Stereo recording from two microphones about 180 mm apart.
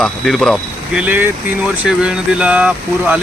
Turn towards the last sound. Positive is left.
turn(degrees=-5)  # may be behind; listen again after turning